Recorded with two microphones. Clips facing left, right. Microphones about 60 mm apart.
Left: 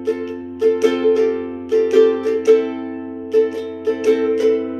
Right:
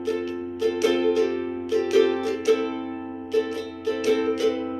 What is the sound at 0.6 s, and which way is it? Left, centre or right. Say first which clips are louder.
Music: left 7 dB; left.